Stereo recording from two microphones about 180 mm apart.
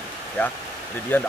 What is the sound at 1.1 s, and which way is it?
Speech, 10° left (ahead or behind).